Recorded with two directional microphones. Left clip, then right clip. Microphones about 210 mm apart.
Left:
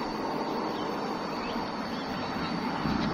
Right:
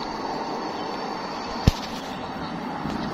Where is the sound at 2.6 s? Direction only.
40° right (ahead or behind).